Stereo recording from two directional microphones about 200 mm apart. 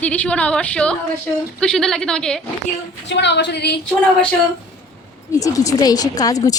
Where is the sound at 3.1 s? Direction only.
60° left (ahead or behind).